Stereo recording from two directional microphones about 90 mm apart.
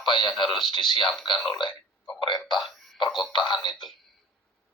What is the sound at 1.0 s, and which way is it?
Speech, centre (ahead or behind).